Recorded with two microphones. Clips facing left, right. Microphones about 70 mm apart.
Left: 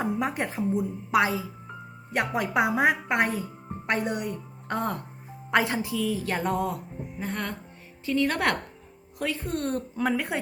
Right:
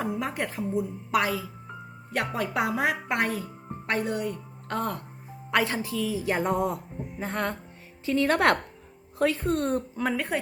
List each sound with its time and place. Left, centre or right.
0.0 s a woman's voice: left
6.1 s speech: centre
10.2 s a woman's voice: centre